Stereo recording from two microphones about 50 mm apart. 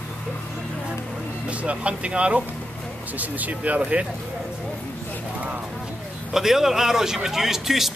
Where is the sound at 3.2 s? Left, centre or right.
Right.